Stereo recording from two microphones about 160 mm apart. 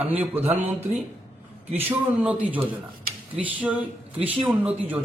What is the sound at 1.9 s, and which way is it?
Speech, 10° right (ahead or behind).